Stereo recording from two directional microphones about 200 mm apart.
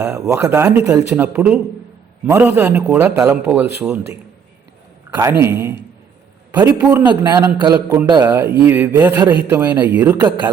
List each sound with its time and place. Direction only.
0.0 s a man's voice: 10° right (ahead or behind)
5.4 s a man's voice: 10° right (ahead or behind)
7.3 s a man's voice: 20° right (ahead or behind)